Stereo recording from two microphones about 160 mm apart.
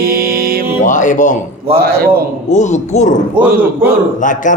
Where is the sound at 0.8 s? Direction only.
50° left (ahead or behind).